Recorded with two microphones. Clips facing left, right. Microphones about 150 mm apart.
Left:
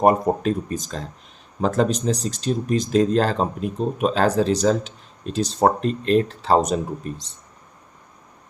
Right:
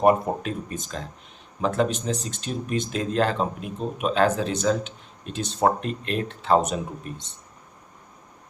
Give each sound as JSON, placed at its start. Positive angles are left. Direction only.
{"t": 0.0, "sound": "speech", "side_deg": 40}